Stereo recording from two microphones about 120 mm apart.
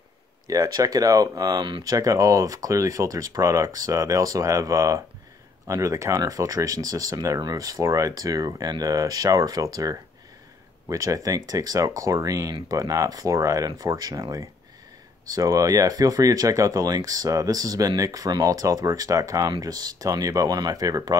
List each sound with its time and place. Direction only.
0.5 s speech: 30° right (ahead or behind)